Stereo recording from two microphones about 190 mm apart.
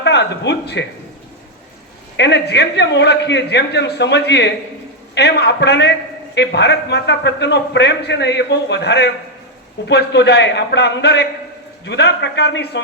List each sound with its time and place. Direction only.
0.0 s speech: 65° left (ahead or behind)
2.1 s a man's voice: 65° left (ahead or behind)